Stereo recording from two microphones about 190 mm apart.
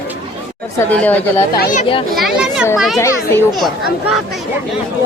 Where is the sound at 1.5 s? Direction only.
40° left (ahead or behind).